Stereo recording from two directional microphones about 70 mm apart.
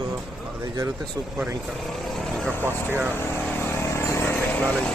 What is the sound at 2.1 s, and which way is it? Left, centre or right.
Speech, centre.